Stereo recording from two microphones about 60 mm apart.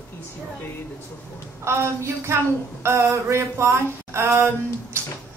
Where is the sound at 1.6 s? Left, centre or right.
Right.